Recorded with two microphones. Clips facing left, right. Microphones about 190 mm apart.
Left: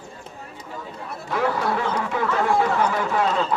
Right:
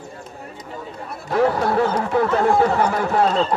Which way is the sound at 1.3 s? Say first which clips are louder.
Right 5 dB; 40° right (ahead or behind).